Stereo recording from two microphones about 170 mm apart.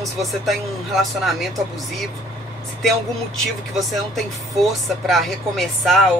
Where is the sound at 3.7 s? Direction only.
Centre (ahead or behind).